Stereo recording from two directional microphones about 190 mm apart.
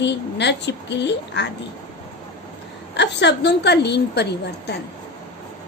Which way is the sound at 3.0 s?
65° left (ahead or behind).